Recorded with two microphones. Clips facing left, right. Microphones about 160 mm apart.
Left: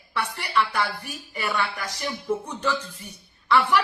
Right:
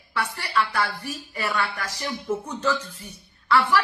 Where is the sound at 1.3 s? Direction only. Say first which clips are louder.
Even; 10° left (ahead or behind).